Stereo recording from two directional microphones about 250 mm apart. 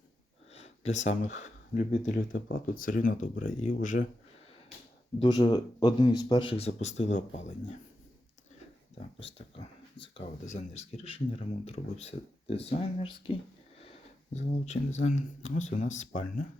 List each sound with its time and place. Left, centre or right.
0.5 s speech: left
5.2 s speech: centre
9.6 s speech: left
13.7 s sniff: left
15.0 s speech: left